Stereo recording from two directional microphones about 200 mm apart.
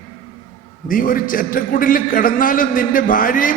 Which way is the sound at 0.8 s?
45° left (ahead or behind).